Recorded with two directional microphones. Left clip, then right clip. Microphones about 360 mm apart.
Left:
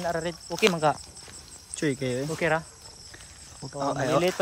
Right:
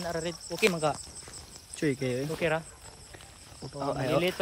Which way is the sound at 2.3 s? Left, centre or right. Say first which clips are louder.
Left 4 dB; left.